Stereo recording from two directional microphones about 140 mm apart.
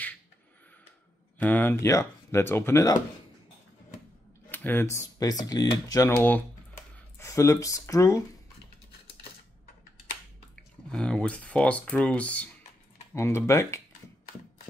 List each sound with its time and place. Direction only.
1.4 s speech: 10° left (ahead or behind)
4.5 s speech: 15° left (ahead or behind)
10.5 s speech: 5° left (ahead or behind)
13.1 s speech: 20° left (ahead or behind)